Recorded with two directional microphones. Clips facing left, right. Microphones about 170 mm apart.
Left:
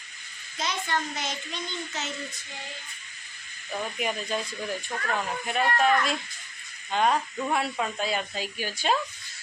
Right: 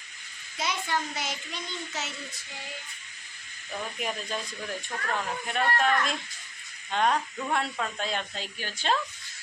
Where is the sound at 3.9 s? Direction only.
5° left (ahead or behind).